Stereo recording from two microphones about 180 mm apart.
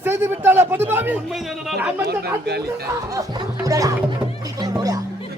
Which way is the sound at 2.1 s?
65° right (ahead or behind).